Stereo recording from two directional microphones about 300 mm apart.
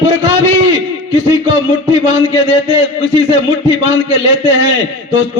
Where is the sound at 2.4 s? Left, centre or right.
Left.